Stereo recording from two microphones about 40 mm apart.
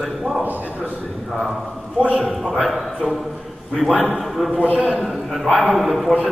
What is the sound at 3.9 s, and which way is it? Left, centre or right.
Speech, right.